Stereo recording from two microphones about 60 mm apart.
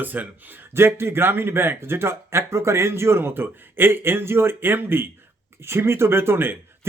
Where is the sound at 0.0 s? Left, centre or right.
Right.